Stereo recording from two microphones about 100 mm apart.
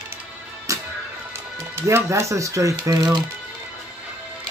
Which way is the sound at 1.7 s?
25° right (ahead or behind).